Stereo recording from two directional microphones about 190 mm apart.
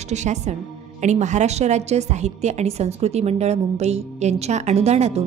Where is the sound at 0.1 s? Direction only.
35° right (ahead or behind).